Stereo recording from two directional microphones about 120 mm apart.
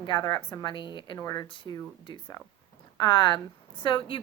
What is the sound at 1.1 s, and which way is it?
A woman's voice, 30° left (ahead or behind).